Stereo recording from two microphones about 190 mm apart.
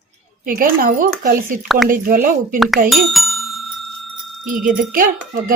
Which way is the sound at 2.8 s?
Centre (ahead or behind).